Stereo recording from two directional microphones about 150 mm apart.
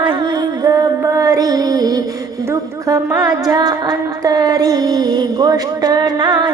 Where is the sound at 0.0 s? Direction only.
30° right (ahead or behind).